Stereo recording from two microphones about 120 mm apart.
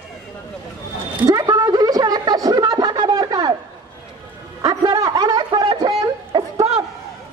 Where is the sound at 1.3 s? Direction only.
30° right (ahead or behind).